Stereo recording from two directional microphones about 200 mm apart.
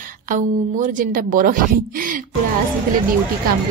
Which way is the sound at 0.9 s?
45° right (ahead or behind).